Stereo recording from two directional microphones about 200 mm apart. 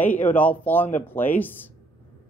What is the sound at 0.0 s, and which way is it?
Speech, 10° left (ahead or behind).